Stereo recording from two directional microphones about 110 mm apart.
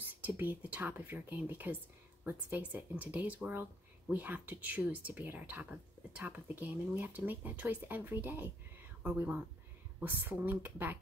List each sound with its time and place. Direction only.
0.2 s a woman's voice: 15° right (ahead or behind)